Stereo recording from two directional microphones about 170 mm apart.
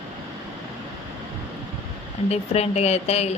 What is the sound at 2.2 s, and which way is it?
A woman's voice, 40° left (ahead or behind).